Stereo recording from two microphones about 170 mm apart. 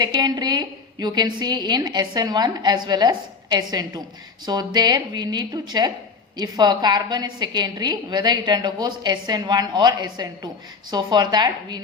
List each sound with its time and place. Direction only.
0.0 s a woman's voice: 25° right (ahead or behind)